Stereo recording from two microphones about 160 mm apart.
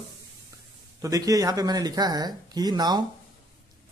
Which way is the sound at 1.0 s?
20° right (ahead or behind).